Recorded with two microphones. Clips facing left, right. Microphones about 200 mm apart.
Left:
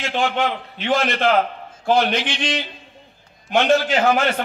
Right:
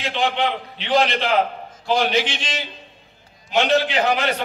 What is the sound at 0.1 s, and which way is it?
A man's voice, 45° left (ahead or behind).